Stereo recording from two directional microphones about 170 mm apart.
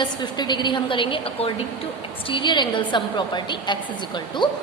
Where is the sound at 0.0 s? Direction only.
25° left (ahead or behind).